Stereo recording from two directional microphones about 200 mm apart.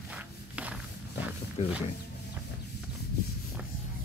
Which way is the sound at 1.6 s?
35° left (ahead or behind).